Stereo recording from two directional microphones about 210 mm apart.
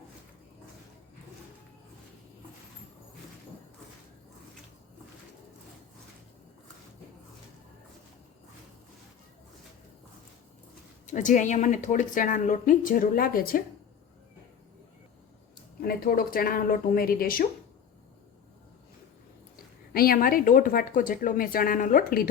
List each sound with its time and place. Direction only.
11.0 s a woman's voice: 35° left (ahead or behind)
15.8 s a woman's voice: 45° left (ahead or behind)
19.9 s a woman's voice: 45° left (ahead or behind)